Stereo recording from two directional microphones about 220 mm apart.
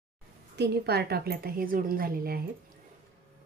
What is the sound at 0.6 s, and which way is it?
A woman's voice, 45° right (ahead or behind).